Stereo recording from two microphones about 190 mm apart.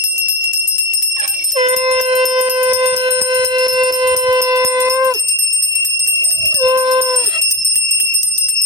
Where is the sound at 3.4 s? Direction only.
20° right (ahead or behind).